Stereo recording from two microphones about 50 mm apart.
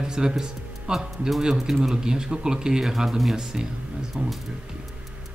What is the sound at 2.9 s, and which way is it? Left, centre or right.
Speech, centre.